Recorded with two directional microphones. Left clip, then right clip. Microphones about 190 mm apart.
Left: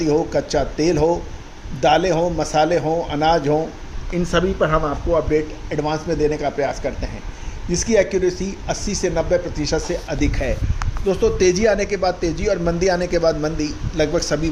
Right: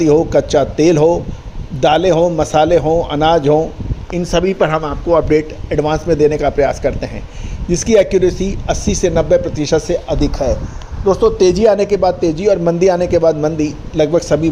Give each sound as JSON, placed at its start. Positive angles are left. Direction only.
{"t": 0.0, "sound": "a man's voice", "side_deg": -40}
{"t": 4.2, "sound": "a woman's voice", "side_deg": -15}
{"t": 4.7, "sound": "a man's voice", "side_deg": -30}
{"t": 5.1, "sound": "a man's voice", "side_deg": -50}
{"t": 10.2, "sound": "a woman's voice", "side_deg": -15}
{"t": 11.3, "sound": "a man's voice", "side_deg": -30}